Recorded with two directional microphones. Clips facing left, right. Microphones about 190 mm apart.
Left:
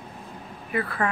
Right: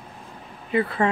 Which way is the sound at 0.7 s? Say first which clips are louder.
Right 5 dB; 25° right (ahead or behind).